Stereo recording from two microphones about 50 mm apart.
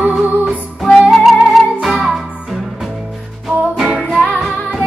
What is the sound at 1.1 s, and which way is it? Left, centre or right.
Music, centre.